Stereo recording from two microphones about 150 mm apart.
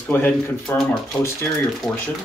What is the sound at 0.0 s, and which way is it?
Speech, 10° left (ahead or behind).